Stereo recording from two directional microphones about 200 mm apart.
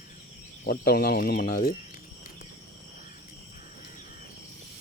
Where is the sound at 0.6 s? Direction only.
45° left (ahead or behind).